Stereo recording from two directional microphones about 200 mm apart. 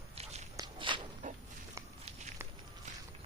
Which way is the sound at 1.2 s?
40° right (ahead or behind).